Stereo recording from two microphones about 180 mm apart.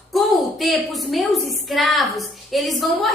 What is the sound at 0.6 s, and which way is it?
A woman's voice, centre (ahead or behind).